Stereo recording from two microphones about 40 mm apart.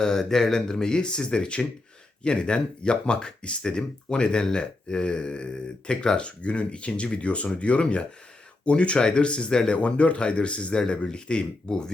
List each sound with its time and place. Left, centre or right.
0.0 s speech: centre
9.7 s speech: left